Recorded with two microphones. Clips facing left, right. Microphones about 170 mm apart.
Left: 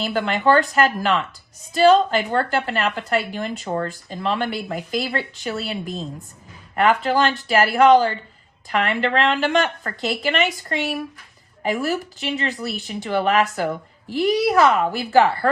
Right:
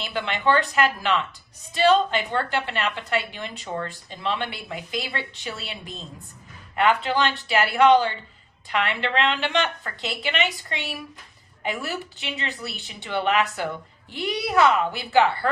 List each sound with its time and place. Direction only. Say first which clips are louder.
0.0 s speech: left 5 dB; 40° left (ahead or behind)
12.6 s speech: left 7 dB; centre (ahead or behind)
12.9 s a woman's voice: left 4 dB; 40° left (ahead or behind)